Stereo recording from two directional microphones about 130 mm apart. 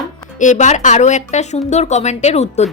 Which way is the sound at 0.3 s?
70° left (ahead or behind).